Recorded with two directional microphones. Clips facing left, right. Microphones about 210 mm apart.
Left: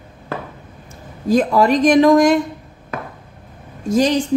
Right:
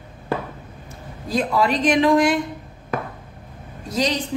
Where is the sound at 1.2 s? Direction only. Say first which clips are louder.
Left 6 dB; 45° left (ahead or behind).